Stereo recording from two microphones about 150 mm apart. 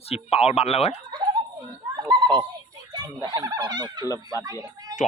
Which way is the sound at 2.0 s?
30° right (ahead or behind).